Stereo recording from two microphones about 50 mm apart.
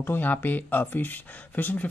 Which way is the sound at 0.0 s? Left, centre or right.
Left.